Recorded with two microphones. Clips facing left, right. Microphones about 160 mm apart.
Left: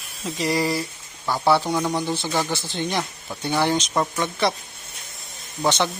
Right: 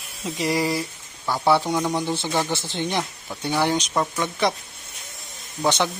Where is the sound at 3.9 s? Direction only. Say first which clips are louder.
Left 1 dB; 5° left (ahead or behind).